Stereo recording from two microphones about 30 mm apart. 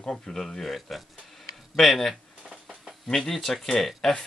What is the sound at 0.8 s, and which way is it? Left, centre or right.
Speech, centre.